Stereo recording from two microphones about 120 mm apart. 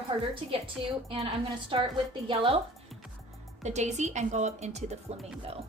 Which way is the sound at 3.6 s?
75° right (ahead or behind).